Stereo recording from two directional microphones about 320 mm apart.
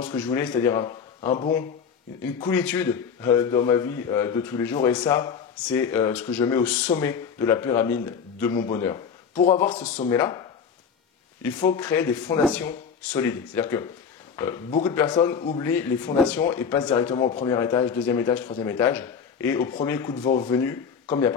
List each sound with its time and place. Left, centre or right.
0.0 s speech: centre
1.2 s speech: left
2.4 s speech: centre
9.4 s speech: left
11.4 s speech: centre